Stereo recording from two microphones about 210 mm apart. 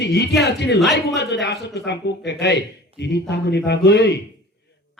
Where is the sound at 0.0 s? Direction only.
55° left (ahead or behind).